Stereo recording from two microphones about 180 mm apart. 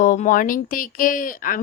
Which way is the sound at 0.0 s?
45° left (ahead or behind).